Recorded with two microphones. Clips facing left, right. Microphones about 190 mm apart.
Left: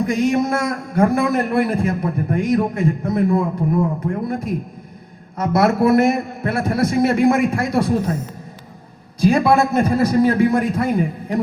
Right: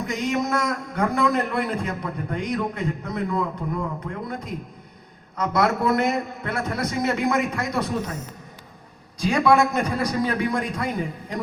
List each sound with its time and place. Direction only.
0.3 s a man's voice: 25° left (ahead or behind)
9.3 s a man's voice: 25° left (ahead or behind)